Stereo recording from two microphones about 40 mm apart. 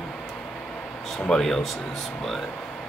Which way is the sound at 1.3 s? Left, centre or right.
Centre.